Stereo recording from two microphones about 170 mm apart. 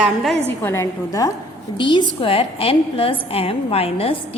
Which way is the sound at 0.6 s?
15° left (ahead or behind).